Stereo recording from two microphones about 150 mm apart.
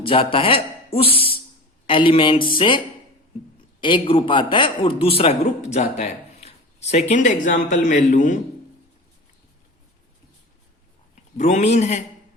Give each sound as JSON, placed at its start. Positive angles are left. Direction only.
{"t": 0.0, "sound": "speech", "side_deg": 35}
{"t": 1.1, "sound": "a sound", "side_deg": 40}
{"t": 1.9, "sound": "a man's voice", "side_deg": 35}
{"t": 11.1, "sound": "a man's voice", "side_deg": 50}